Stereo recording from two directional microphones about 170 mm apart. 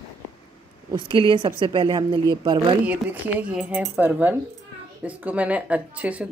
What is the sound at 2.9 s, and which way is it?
Speech, 10° right (ahead or behind).